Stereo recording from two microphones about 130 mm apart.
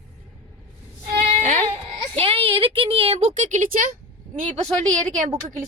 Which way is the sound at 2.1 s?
45° right (ahead or behind).